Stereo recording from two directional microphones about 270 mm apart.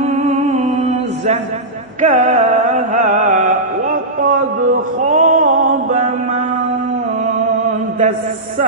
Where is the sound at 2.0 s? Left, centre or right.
Right.